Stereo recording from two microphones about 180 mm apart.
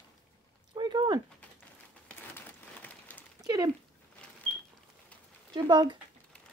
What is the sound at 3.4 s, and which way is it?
Dog, 20° right (ahead or behind).